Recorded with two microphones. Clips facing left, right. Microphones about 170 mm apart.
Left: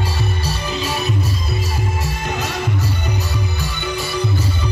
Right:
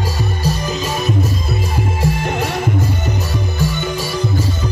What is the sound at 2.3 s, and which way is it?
Music, 55° right (ahead or behind).